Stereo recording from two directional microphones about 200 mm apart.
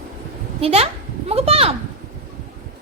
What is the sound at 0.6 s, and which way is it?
A child's voice, 30° right (ahead or behind).